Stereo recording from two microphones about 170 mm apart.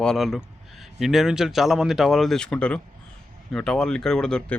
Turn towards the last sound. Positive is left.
turn(degrees=5)  # may be behind; listen again after turning